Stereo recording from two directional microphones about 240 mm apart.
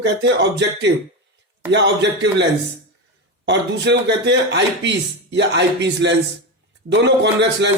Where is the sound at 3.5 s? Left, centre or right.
Right.